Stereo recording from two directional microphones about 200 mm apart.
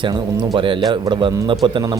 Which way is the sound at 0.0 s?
20° right (ahead or behind).